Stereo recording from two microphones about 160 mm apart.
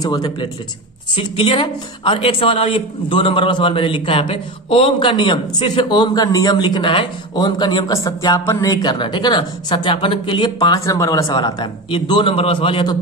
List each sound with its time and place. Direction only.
0.0 s a man's voice: 25° left (ahead or behind)